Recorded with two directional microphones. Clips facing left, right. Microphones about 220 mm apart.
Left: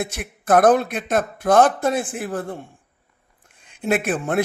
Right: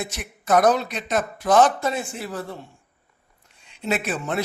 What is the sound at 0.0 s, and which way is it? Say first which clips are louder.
Speech: left 4 dB; 55° left (ahead or behind).